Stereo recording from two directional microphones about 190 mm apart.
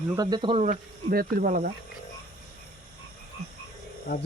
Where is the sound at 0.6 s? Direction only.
50° right (ahead or behind).